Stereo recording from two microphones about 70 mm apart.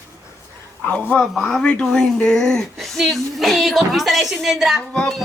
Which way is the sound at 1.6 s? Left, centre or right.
Centre.